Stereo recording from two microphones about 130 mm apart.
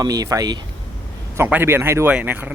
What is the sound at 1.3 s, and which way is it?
Speech, 15° right (ahead or behind).